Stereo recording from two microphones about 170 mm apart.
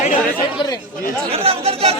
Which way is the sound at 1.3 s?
35° right (ahead or behind).